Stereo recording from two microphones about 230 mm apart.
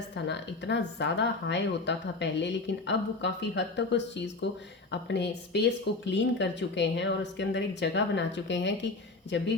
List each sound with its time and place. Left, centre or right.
0.3 s speech: left